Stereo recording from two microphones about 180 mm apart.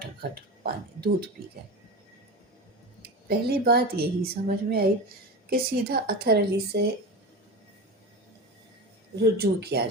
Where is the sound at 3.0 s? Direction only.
60° right (ahead or behind).